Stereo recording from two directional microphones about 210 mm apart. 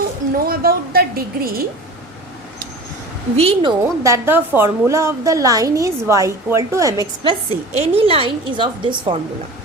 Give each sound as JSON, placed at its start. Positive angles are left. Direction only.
{"t": 0.4, "sound": "a woman's voice", "side_deg": -45}
{"t": 3.3, "sound": "a woman's voice", "side_deg": -25}